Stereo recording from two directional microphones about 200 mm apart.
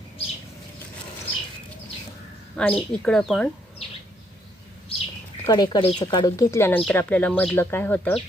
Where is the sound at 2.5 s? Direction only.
5° left (ahead or behind).